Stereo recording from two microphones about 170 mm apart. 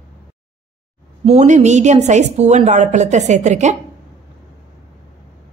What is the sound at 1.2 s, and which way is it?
A woman's voice, 35° right (ahead or behind).